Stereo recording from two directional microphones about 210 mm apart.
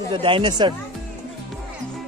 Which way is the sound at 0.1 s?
25° right (ahead or behind).